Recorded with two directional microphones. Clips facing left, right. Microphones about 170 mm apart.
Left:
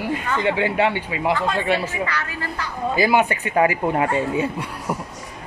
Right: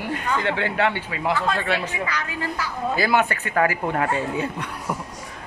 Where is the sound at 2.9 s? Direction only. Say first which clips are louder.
Left 3 dB; 15° left (ahead or behind).